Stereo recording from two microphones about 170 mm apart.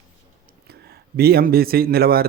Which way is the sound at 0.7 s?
65° right (ahead or behind).